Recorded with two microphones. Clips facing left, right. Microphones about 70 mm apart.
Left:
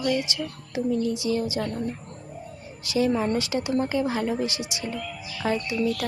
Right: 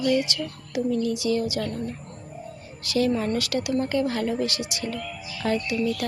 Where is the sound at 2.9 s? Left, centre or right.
Centre.